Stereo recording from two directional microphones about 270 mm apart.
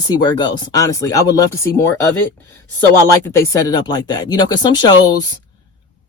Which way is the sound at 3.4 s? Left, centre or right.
Centre.